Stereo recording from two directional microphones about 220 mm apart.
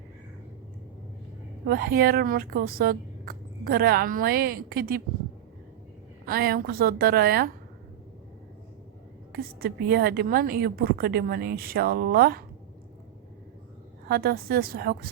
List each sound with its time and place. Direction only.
1.6 s speech: 40° right (ahead or behind)
6.2 s speech: 45° right (ahead or behind)
9.3 s speech: 45° right (ahead or behind)
14.1 s speech: 45° right (ahead or behind)